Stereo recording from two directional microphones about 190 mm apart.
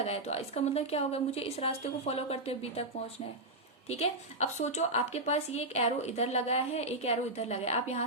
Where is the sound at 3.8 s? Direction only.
35° left (ahead or behind).